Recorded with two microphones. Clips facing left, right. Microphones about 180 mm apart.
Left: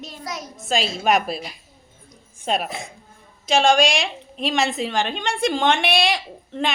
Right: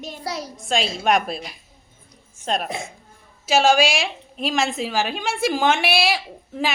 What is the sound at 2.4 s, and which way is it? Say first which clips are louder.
A woman's voice: left 1 dB; 5° left (ahead or behind).